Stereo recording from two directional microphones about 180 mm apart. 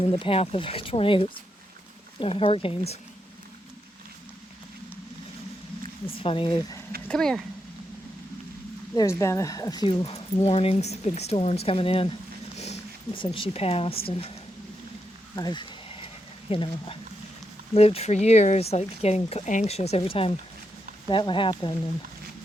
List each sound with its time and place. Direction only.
0.0 s speech: 30° left (ahead or behind)
6.1 s speech: 30° left (ahead or behind)
7.1 s speech: 5° left (ahead or behind)
9.0 s speech: 15° left (ahead or behind); by 14.0 s 30° left (ahead or behind)
15.4 s a sound: 25° left (ahead or behind)
16.5 s speech: 30° left (ahead or behind)